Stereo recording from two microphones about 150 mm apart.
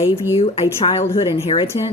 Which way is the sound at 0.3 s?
45° left (ahead or behind).